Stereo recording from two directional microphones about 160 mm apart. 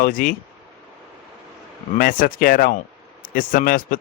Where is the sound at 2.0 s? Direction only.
60° left (ahead or behind).